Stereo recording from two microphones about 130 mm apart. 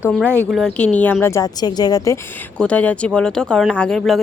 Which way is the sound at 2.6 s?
10° left (ahead or behind).